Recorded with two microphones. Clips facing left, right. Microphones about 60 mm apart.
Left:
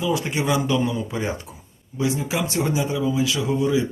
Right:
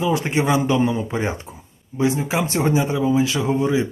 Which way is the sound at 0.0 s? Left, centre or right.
Right.